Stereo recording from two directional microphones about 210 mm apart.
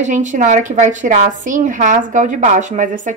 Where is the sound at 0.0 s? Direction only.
35° right (ahead or behind).